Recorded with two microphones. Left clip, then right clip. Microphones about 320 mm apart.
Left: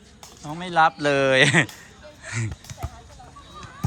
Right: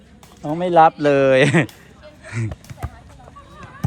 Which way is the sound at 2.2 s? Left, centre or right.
Centre.